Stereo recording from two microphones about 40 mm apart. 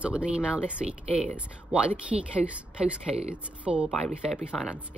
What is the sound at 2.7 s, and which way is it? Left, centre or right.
Speech, right.